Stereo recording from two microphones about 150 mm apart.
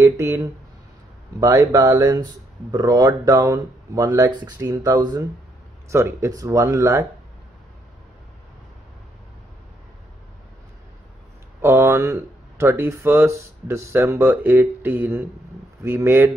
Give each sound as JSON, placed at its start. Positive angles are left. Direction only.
{"t": 0.0, "sound": "speech", "side_deg": -20}
{"t": 1.4, "sound": "speech", "side_deg": -20}
{"t": 11.6, "sound": "speech", "side_deg": -20}